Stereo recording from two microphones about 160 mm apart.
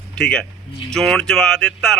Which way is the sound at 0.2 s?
5° left (ahead or behind).